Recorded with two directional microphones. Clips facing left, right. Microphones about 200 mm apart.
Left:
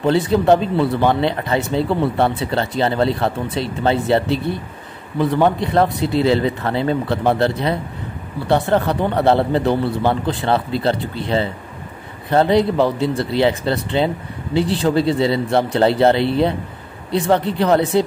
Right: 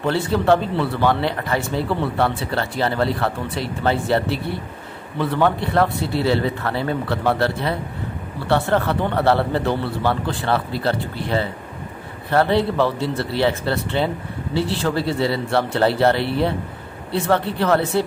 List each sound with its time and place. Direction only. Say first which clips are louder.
0.0 s speech: left 4 dB; 20° left (ahead or behind)